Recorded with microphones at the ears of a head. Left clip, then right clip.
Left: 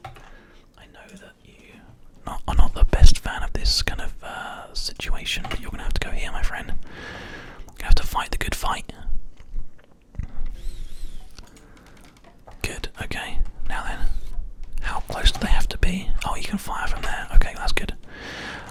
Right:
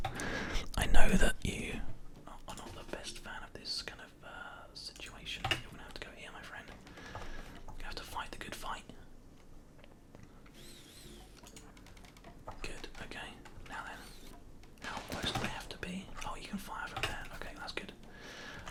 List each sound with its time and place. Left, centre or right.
0.2 s whispering: right
2.2 s whispering: left
12.6 s whispering: left